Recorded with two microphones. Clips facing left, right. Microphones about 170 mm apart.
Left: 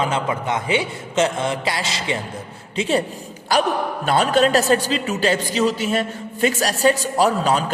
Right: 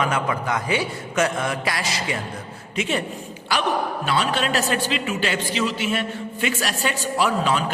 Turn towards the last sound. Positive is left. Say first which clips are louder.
# left 3 dB
turn(degrees=40)  # may be behind; listen again after turning